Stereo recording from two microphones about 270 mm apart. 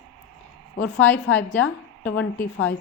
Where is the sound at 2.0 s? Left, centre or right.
Left.